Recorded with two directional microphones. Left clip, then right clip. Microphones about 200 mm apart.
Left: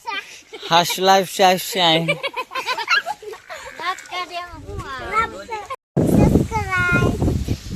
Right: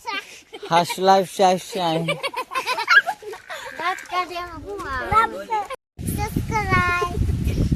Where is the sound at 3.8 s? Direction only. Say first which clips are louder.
Right 2 dB; 50° right (ahead or behind).